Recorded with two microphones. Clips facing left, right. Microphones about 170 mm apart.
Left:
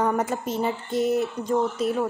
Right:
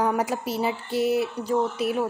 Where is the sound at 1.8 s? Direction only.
65° right (ahead or behind).